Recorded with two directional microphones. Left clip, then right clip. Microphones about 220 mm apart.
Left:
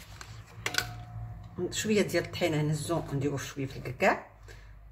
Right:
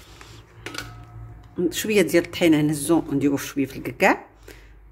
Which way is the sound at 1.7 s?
45° right (ahead or behind).